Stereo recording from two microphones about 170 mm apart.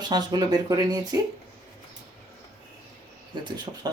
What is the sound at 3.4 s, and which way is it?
Speech, 25° right (ahead or behind).